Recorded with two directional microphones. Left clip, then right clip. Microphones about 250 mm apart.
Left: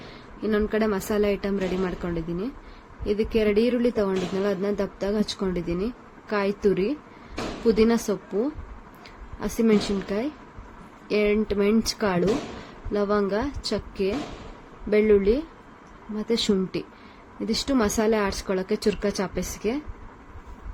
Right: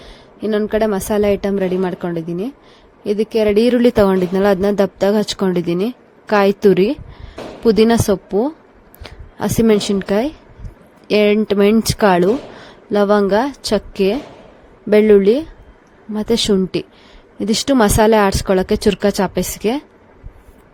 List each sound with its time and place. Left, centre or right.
0.4 s a woman's voice: right